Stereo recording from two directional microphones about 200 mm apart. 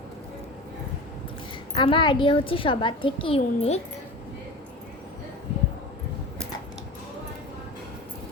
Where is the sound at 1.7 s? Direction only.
25° left (ahead or behind).